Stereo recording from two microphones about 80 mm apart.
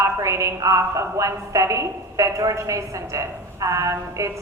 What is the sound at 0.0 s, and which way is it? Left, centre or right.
A woman's voice, right.